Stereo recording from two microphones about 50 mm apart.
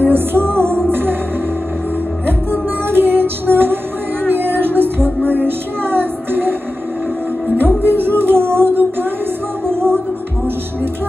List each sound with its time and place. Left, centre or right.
0.0 s music: right
2.9 s music: right
7.5 s music: right